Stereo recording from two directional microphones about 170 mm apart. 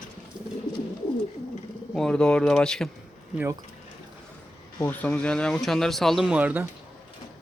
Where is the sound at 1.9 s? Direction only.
5° left (ahead or behind).